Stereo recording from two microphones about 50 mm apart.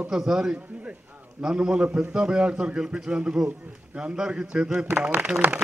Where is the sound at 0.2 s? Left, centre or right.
Centre.